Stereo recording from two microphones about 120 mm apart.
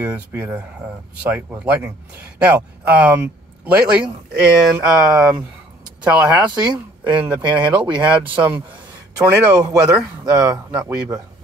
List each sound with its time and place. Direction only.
0.0 s speech: 15° right (ahead or behind)
9.1 s speech: 30° right (ahead or behind)
9.9 s speech: 5° right (ahead or behind)